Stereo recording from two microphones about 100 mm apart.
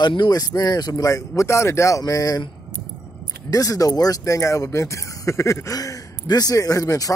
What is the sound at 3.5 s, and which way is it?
Speech, 35° left (ahead or behind).